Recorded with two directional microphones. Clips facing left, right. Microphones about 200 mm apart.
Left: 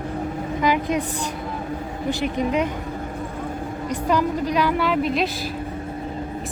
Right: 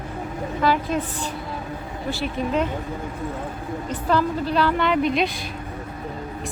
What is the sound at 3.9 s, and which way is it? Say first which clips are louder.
Speech: left 1 dB; 15° left (ahead or behind).